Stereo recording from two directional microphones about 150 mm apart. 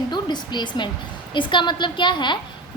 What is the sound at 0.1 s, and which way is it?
A woman's voice, 30° left (ahead or behind).